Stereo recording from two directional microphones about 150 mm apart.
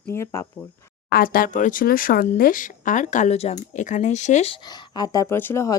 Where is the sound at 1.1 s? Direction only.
75° left (ahead or behind); by 4.5 s 50° left (ahead or behind).